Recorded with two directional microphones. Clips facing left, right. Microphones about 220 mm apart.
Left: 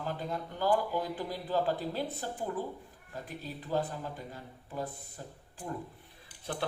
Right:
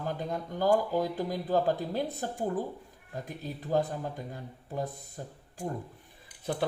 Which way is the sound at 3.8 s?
40° right (ahead or behind).